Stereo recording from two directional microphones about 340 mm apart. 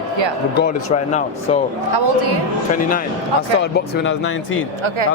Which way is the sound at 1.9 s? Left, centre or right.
Right.